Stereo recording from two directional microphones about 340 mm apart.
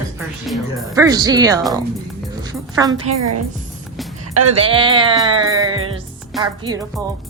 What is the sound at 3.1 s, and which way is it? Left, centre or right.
Speech, right.